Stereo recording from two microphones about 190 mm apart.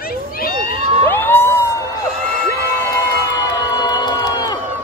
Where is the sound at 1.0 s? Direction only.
10° left (ahead or behind).